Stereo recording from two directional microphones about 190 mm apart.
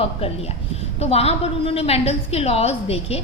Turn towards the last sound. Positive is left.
turn(degrees=30)  # may be behind; listen again after turning